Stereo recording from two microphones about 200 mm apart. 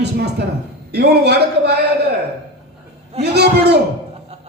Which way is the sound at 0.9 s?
55° right (ahead or behind).